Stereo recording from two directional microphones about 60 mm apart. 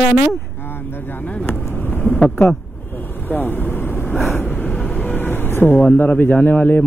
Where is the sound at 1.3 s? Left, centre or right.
Left.